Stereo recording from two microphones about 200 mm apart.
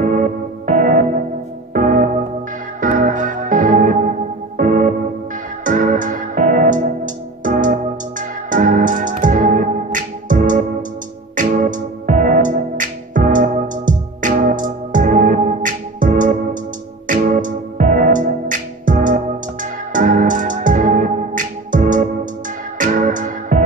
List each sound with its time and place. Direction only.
0.0 s music: 40° right (ahead or behind)